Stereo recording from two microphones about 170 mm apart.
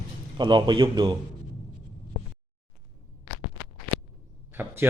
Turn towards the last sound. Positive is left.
turn(degrees=-10)  # may be behind; listen again after turning